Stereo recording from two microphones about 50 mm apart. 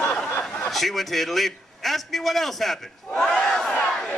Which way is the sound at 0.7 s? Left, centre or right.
Centre.